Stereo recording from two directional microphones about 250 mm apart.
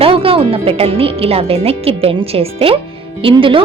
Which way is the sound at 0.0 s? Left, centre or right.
Right.